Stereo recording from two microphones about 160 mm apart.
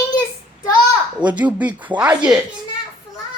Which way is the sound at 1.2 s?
30° right (ahead or behind).